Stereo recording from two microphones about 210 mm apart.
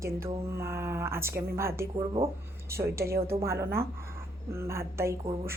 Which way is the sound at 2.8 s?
10° right (ahead or behind).